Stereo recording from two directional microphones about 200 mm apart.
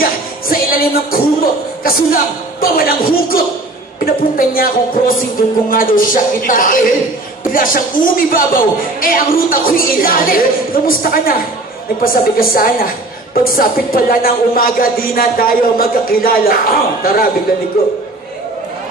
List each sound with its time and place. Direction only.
0.0 s music: 45° left (ahead or behind)
2.6 s a woman's voice: 50° left (ahead or behind)